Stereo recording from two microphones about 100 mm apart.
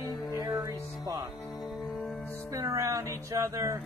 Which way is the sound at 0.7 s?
35° right (ahead or behind).